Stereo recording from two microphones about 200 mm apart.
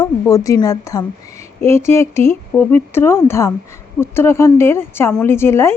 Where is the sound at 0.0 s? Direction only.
15° left (ahead or behind).